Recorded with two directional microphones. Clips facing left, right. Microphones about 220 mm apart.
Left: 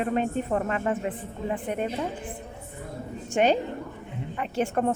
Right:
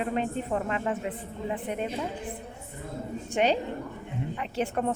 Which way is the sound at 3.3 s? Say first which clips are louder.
Left 3 dB; 50° left (ahead or behind).